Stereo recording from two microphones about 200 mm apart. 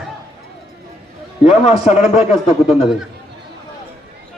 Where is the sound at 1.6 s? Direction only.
35° left (ahead or behind).